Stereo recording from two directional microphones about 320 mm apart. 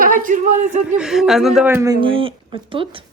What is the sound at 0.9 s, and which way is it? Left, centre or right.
A woman's voice, centre.